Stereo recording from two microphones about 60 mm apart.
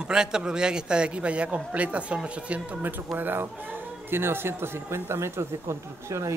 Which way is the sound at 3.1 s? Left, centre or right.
Right.